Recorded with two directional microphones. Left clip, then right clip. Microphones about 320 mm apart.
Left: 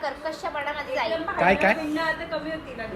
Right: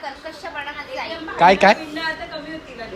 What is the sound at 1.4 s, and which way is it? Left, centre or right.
Speech, centre.